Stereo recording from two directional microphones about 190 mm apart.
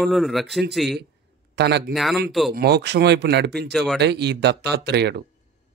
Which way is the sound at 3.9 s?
65° right (ahead or behind).